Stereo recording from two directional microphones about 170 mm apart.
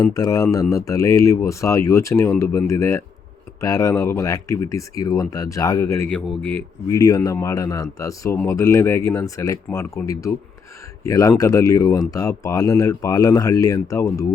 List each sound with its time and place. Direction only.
0.0 s a man's voice: 20° left (ahead or behind)
6.1 s a man's voice: 5° left (ahead or behind)